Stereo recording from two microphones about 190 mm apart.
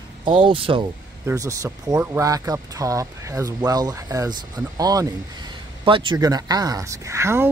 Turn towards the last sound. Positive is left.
turn(degrees=-15)  # may be behind; listen again after turning